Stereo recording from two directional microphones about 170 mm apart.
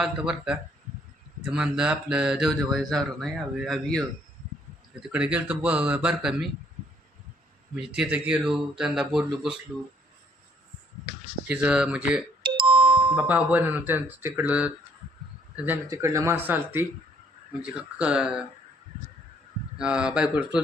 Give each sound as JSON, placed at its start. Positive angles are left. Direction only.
{"t": 0.0, "sound": "speech", "side_deg": -5}
{"t": 7.8, "sound": "speech", "side_deg": -5}
{"t": 11.4, "sound": "speech", "side_deg": -5}
{"t": 12.5, "sound": "doorbell", "side_deg": -30}
{"t": 13.1, "sound": "speech", "side_deg": -10}
{"t": 19.7, "sound": "speech", "side_deg": -5}